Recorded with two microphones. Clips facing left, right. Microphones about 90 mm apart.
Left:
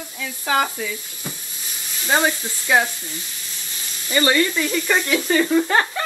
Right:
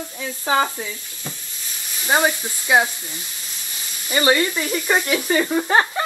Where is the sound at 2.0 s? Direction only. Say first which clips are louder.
Right 1 dB; 15° right (ahead or behind).